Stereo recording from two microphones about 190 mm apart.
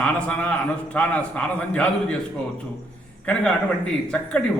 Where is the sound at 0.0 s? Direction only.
5° left (ahead or behind).